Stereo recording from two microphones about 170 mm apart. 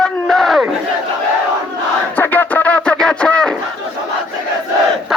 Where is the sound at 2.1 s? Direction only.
10° left (ahead or behind).